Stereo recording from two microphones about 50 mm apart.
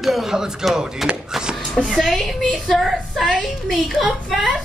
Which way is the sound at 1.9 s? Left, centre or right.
Centre.